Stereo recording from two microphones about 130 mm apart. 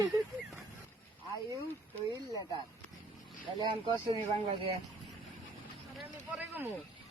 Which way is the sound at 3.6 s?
40° right (ahead or behind).